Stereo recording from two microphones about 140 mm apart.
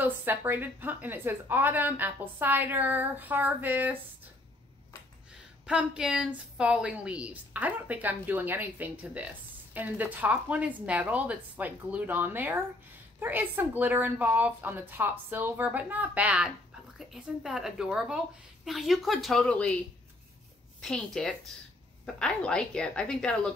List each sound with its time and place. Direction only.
0.0 s a woman's voice: 15° right (ahead or behind)
5.7 s a woman's voice: 5° right (ahead or behind)
20.8 s a woman's voice: 5° left (ahead or behind)